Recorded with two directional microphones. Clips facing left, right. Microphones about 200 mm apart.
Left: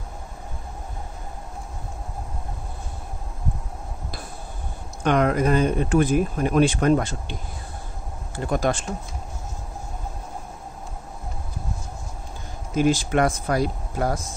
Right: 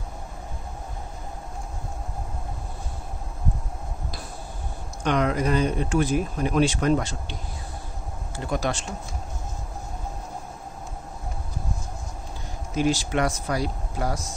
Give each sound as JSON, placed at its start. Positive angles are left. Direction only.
{"t": 5.0, "sound": "speech", "side_deg": 50}
{"t": 8.5, "sound": "speech", "side_deg": 50}
{"t": 12.7, "sound": "speech", "side_deg": 50}